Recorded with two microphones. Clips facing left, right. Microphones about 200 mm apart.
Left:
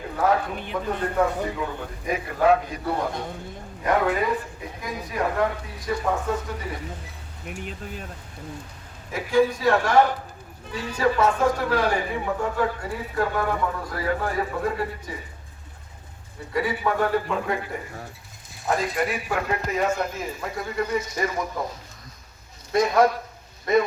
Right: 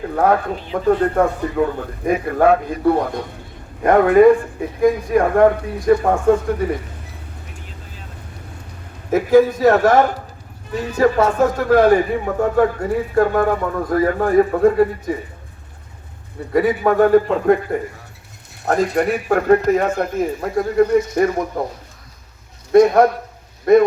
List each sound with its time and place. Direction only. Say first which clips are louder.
1.1 s a man's voice: right 6 dB; 50° right (ahead or behind)
9.1 s speech: right 8 dB; 45° right (ahead or behind)
16.5 s speech: right 9 dB; 50° right (ahead or behind)
18.6 s a man's voice: right 7 dB; 65° right (ahead or behind)
19.1 s a man's voice: right 12 dB; 50° right (ahead or behind)
22.7 s a man's voice: right 9 dB; 55° right (ahead or behind)